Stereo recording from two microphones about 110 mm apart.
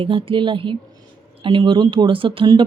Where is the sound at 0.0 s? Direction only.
55° right (ahead or behind).